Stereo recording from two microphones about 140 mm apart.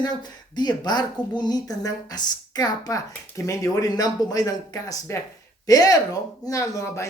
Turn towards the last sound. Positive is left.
turn(degrees=25)  # may be behind; listen again after turning